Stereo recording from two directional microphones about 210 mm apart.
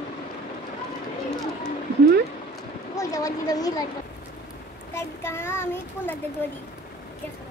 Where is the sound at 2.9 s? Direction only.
15° left (ahead or behind).